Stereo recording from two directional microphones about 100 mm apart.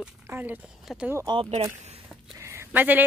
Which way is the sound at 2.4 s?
25° right (ahead or behind).